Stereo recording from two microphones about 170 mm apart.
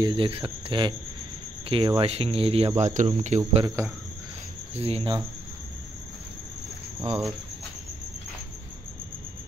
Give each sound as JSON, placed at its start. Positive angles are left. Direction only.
{"t": 0.0, "sound": "speech", "side_deg": -30}
{"t": 3.6, "sound": "cricket", "side_deg": -20}
{"t": 4.7, "sound": "speech", "side_deg": -35}